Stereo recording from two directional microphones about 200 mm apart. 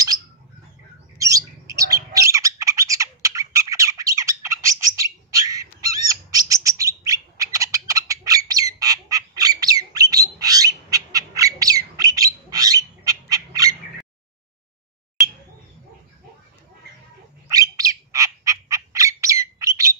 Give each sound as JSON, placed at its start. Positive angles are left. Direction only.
{"t": 1.1, "sound": "bird", "side_deg": -15}
{"t": 17.5, "sound": "squawk", "side_deg": -15}